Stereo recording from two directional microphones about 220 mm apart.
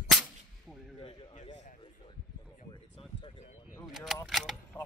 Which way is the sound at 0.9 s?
25° left (ahead or behind).